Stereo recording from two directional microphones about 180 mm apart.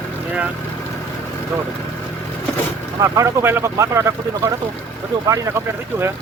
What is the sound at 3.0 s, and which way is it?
Speech, 15° right (ahead or behind).